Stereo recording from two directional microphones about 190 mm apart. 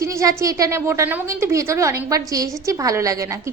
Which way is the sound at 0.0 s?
15° right (ahead or behind).